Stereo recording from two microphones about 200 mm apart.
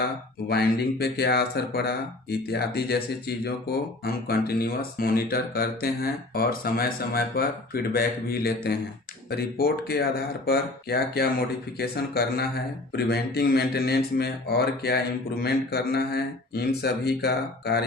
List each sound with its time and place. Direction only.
0.4 s speech: 50° left (ahead or behind)